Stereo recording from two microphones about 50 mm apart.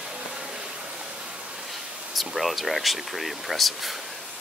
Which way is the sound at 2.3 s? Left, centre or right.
Centre.